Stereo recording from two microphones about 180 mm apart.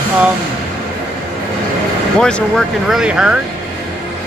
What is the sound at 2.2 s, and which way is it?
Speech, 5° left (ahead or behind).